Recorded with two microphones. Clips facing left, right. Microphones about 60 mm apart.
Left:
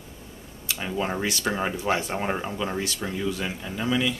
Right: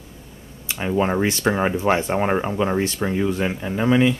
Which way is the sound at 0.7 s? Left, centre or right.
Right.